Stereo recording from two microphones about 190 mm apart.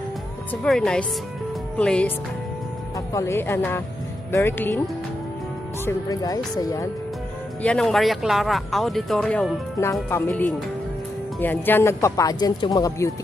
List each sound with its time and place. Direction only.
0.5 s speech: 5° left (ahead or behind)
5.9 s speech: 20° left (ahead or behind)
7.6 s speech: 5° left (ahead or behind)
11.4 s speech: 10° left (ahead or behind)